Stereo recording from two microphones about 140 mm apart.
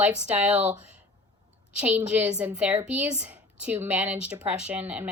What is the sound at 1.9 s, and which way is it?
A woman's voice, 15° right (ahead or behind).